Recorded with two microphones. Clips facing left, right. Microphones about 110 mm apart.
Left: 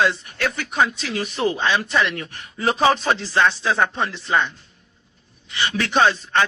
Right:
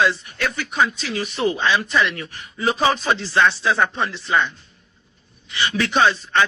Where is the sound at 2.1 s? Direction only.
50° left (ahead or behind).